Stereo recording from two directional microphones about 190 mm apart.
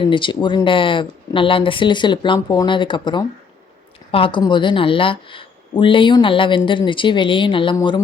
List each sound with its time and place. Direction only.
0.0 s a woman's voice: 25° left (ahead or behind)